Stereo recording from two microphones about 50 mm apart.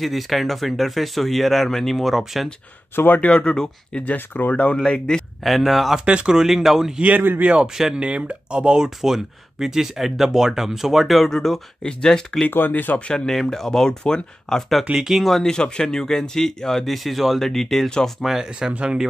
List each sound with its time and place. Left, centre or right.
0.0 s speech: centre
3.2 s speech: left
4.0 s speech: left
4.8 s speech: centre
5.4 s speech: centre
5.9 s speech: centre
7.0 s speech: right
7.4 s speech: right; by 12.4 s centre
12.4 s speech: left
13.1 s speech: centre
15.0 s speech: centre
15.2 s speech: centre
18.2 s speech: centre
18.7 s speech: right